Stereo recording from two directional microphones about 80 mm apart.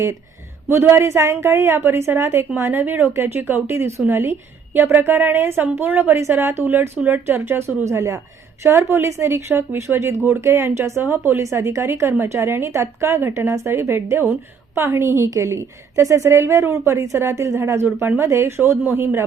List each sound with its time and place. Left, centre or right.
0.7 s a woman's voice: right
7.9 s a woman's voice: right